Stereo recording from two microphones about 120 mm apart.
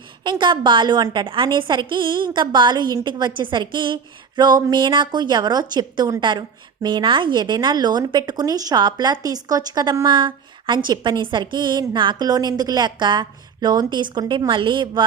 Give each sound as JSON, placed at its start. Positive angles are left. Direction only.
{"t": 0.3, "sound": "a woman's voice", "side_deg": -40}